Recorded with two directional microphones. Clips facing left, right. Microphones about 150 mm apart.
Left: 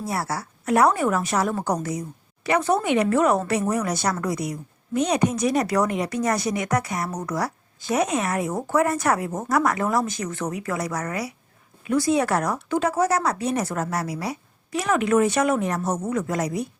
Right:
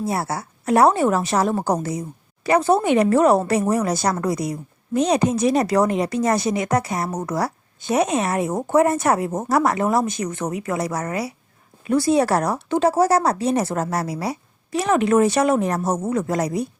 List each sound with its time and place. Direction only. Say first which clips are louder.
0.0 s speech: right 3 dB; 25° right (ahead or behind)